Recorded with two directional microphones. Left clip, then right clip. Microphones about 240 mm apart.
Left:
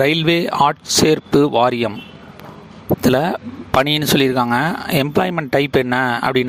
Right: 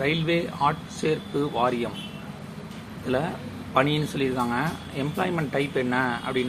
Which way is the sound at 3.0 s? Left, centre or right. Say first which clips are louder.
Left 10 dB; left.